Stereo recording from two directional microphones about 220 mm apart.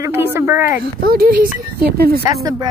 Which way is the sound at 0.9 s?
40° right (ahead or behind).